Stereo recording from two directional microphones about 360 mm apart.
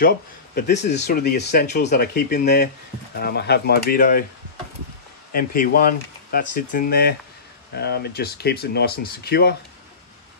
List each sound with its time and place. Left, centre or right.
0.6 s speech: left
5.3 s speech: left